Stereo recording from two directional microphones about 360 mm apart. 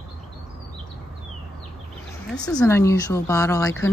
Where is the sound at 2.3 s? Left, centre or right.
Centre.